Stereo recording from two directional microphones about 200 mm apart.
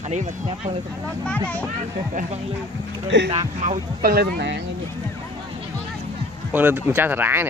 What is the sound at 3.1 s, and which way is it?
Speech, 60° right (ahead or behind).